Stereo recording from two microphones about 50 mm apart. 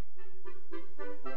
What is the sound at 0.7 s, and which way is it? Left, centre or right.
Music, right.